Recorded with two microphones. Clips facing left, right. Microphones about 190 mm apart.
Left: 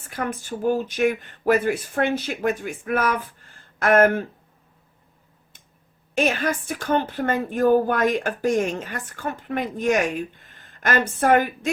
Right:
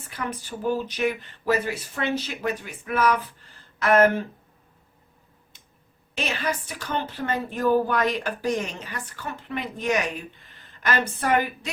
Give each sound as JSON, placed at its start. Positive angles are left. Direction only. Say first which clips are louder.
{"t": 0.1, "sound": "a woman's voice", "louder": "left 4 dB", "side_deg": 50}
{"t": 6.1, "sound": "a woman's voice", "louder": "left 6 dB", "side_deg": 45}